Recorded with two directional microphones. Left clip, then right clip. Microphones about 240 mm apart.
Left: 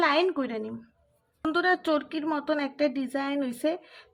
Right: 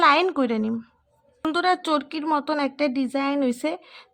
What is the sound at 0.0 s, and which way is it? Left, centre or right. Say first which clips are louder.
A woman's voice: right 6 dB; right.